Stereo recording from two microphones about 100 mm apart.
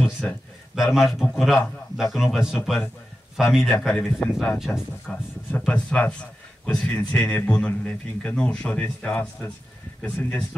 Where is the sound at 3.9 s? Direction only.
20° left (ahead or behind).